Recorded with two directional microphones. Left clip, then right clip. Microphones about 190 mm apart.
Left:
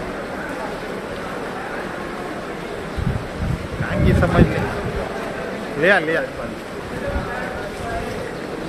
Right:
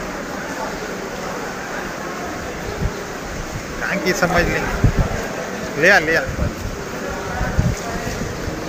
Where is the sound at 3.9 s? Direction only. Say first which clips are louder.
Right 2 dB; centre (ahead or behind).